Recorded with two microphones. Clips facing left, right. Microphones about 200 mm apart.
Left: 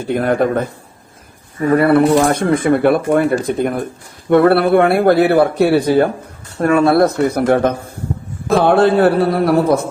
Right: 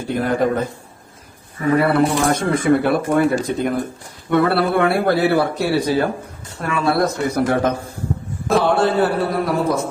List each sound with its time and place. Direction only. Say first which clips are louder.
0.1 s speech: left 3 dB; 60° left (ahead or behind)
1.7 s speech: left 5 dB; 55° left (ahead or behind)